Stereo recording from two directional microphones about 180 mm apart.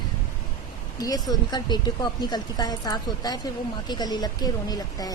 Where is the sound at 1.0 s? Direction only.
20° left (ahead or behind).